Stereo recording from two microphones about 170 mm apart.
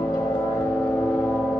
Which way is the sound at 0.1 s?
15° left (ahead or behind).